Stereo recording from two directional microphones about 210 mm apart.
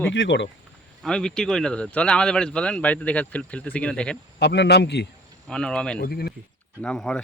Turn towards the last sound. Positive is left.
turn(degrees=0)  # may be behind; listen again after turning